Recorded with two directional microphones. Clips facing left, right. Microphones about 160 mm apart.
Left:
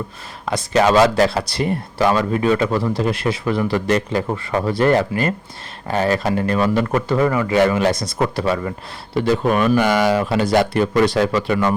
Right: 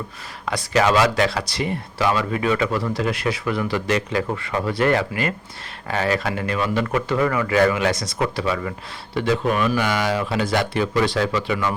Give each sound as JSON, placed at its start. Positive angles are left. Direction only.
{"t": 0.5, "sound": "speech", "side_deg": 30}
{"t": 1.5, "sound": "speech", "side_deg": 45}
{"t": 3.7, "sound": "speech", "side_deg": 40}
{"t": 7.3, "sound": "speech", "side_deg": 25}
{"t": 7.9, "sound": "speech", "side_deg": 50}
{"t": 9.1, "sound": "speech", "side_deg": 40}